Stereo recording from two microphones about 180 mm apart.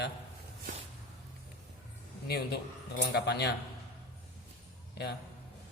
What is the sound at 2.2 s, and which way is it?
Speech, 65° left (ahead or behind).